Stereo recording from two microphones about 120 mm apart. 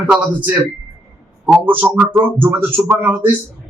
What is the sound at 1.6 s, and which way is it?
A man's voice, 15° right (ahead or behind).